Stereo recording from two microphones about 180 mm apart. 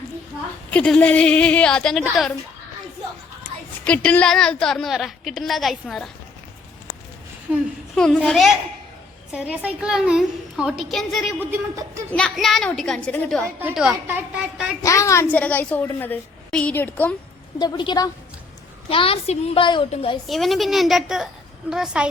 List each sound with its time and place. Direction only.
0.7 s a woman's voice: 10° left (ahead or behind)
3.8 s a woman's voice: 10° left (ahead or behind)
7.9 s a woman's voice: 5° left (ahead or behind); by 12.0 s 10° right (ahead or behind)
12.1 s a woman's voice: 5° left (ahead or behind)
13.6 s a woman's voice: 10° right (ahead or behind)
14.8 s a woman's voice: 15° left (ahead or behind)
17.6 s a woman's voice: 25° left (ahead or behind)
20.2 s a woman's voice: centre (ahead or behind)